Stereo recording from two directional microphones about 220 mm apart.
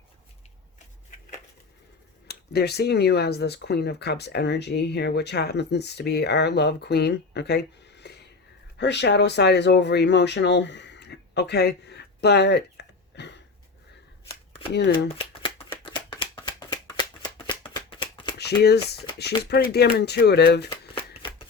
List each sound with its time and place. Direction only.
2.2 s speech: 45° left (ahead or behind)
14.7 s speech: 50° left (ahead or behind)
15.2 s shuffling cards: 20° left (ahead or behind)
18.3 s speech: 50° left (ahead or behind)